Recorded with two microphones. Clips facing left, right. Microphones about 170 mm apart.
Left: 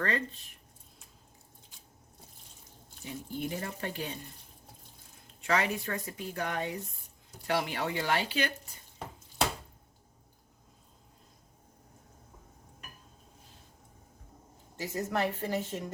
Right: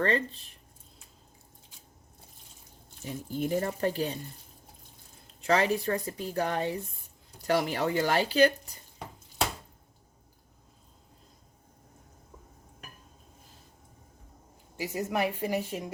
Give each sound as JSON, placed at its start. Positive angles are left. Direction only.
{"t": 3.0, "sound": "a woman's voice", "side_deg": -40}
{"t": 5.4, "sound": "a woman's voice", "side_deg": -35}
{"t": 14.8, "sound": "a woman's voice", "side_deg": -10}